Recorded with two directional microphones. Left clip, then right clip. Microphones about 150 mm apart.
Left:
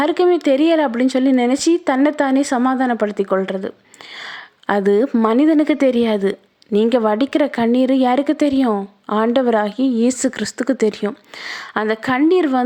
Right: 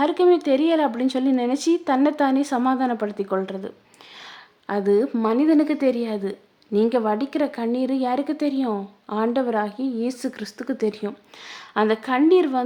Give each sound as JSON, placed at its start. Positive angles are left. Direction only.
{"t": 0.0, "sound": "speech", "side_deg": 30}
{"t": 4.6, "sound": "speech", "side_deg": 40}
{"t": 5.0, "sound": "speech", "side_deg": 25}
{"t": 5.3, "sound": "speech", "side_deg": 35}